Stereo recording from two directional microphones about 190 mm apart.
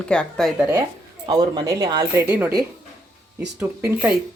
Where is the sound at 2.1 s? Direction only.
10° right (ahead or behind).